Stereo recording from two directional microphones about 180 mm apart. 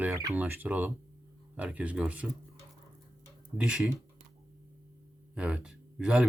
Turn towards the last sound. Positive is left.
turn(degrees=-5)  # may be behind; listen again after turning